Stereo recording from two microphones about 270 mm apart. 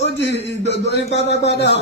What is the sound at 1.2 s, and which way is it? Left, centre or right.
Speech, left.